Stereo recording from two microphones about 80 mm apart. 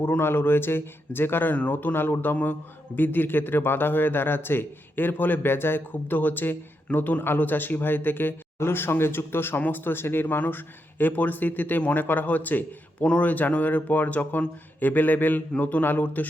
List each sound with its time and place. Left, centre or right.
0.0 s speech: left